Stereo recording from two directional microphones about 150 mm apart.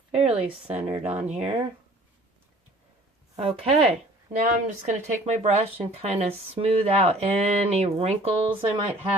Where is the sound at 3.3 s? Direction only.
40° right (ahead or behind).